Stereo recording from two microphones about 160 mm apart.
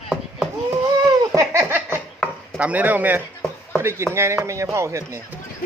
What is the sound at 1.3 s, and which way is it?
Giggle, 15° right (ahead or behind).